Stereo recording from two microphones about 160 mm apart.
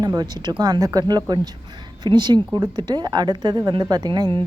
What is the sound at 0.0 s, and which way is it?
Speech, 25° right (ahead or behind).